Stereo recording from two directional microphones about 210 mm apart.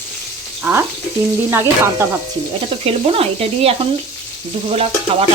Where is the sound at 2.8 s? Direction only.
30° right (ahead or behind).